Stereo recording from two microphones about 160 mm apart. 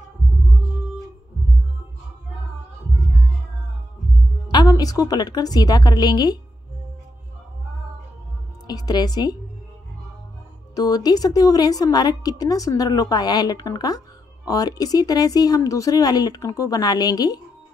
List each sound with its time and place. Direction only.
4.5 s a woman's voice: 25° left (ahead or behind)
8.6 s a woman's voice: 25° left (ahead or behind)
10.7 s a woman's voice: 25° left (ahead or behind)